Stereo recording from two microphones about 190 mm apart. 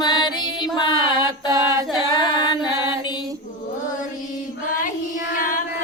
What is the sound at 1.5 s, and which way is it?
Singing, 15° right (ahead or behind).